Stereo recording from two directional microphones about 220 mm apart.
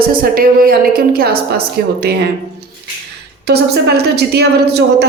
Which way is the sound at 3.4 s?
45° right (ahead or behind).